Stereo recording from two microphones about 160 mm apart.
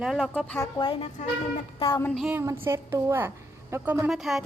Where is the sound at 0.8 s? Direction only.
30° left (ahead or behind).